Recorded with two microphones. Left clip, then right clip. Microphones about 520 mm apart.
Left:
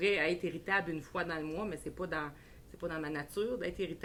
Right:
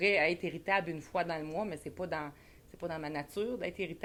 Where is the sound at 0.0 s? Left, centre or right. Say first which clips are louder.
Right 2 dB; right.